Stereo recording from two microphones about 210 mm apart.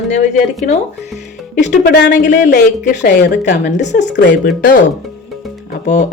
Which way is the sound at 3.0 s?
55° left (ahead or behind).